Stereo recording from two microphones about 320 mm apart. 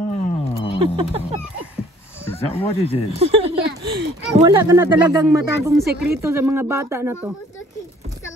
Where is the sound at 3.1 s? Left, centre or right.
Centre.